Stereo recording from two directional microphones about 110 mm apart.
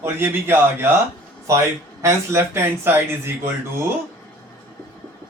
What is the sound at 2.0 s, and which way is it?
Speech, 25° right (ahead or behind).